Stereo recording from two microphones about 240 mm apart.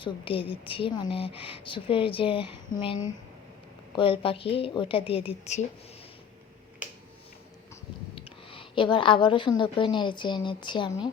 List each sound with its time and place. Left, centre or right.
0.0 s speech: left
8.4 s speech: left